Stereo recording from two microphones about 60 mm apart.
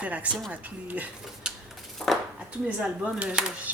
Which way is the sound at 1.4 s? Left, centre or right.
Centre.